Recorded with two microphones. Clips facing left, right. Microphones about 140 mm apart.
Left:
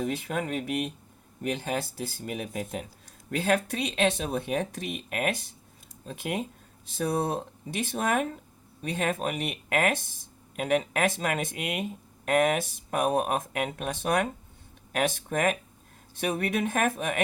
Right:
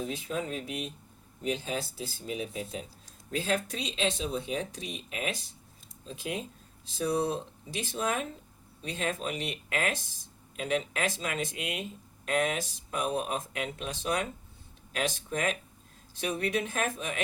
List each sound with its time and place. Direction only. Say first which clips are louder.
0.0 s speech: left 4 dB; 60° left (ahead or behind)